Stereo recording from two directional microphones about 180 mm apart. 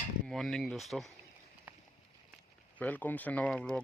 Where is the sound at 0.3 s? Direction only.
5° left (ahead or behind).